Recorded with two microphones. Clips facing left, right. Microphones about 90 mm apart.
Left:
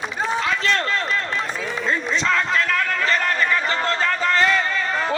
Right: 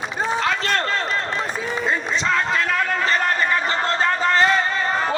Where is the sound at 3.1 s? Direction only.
30° right (ahead or behind).